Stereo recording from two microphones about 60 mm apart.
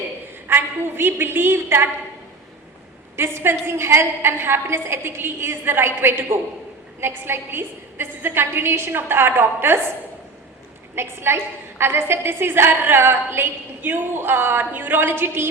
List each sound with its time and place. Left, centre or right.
0.4 s a woman's voice: right
3.2 s a woman's voice: right
10.9 s a woman's voice: right